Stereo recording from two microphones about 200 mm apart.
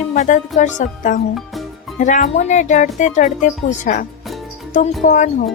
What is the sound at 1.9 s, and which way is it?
A woman's voice, 40° left (ahead or behind).